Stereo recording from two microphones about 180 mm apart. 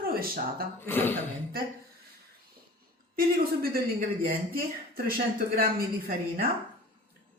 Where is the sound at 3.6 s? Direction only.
55° right (ahead or behind).